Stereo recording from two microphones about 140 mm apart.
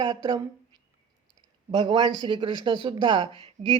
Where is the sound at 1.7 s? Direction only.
35° right (ahead or behind).